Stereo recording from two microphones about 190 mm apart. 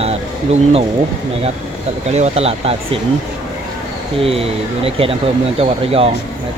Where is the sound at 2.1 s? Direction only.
35° right (ahead or behind).